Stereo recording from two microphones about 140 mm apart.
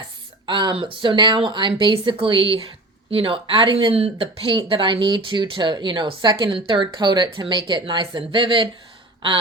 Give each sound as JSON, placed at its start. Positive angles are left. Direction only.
{"t": 0.4, "sound": "speech", "side_deg": -35}